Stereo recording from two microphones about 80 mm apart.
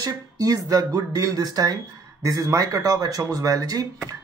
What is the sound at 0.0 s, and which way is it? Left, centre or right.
Speech, right.